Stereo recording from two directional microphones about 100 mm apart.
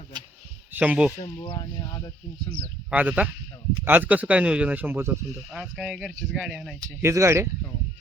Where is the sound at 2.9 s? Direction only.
15° right (ahead or behind).